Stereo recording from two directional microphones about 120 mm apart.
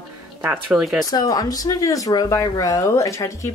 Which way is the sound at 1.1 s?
30° left (ahead or behind).